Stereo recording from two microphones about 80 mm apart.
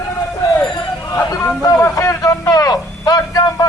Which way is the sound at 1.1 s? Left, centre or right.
Left.